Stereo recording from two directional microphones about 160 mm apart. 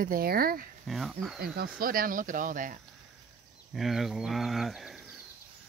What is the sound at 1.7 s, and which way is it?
Speech, 65° right (ahead or behind).